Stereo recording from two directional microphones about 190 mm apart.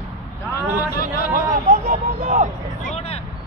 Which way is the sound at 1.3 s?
40° right (ahead or behind).